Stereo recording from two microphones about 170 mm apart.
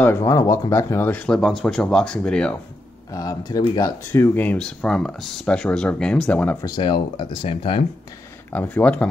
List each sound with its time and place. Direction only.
0.0 s speech: 15° left (ahead or behind)
3.1 s speech: 20° left (ahead or behind)
6.6 s speech: 25° left (ahead or behind)
8.5 s speech: 10° left (ahead or behind)